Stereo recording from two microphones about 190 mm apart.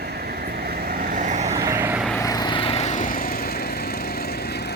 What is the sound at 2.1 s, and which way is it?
Lawn mower, 20° left (ahead or behind).